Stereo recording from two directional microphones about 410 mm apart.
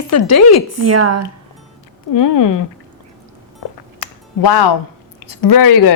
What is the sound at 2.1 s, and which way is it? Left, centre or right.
Speech, left.